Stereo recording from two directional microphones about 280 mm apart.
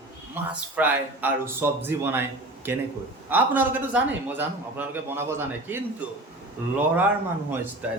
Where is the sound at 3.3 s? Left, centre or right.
Centre.